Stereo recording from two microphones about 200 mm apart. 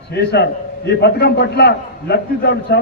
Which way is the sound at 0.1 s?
55° left (ahead or behind).